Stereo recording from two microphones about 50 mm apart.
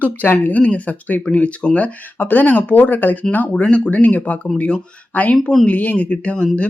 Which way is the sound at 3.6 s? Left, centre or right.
Left.